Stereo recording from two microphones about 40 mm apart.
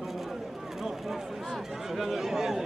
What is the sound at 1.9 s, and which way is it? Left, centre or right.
Speech, centre.